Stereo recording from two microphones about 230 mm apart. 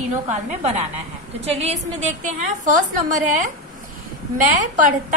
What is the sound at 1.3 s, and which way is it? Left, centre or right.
A woman's voice, right.